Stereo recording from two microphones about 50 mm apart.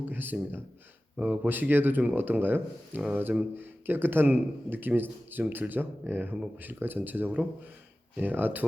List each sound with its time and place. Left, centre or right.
0.0 s speech: right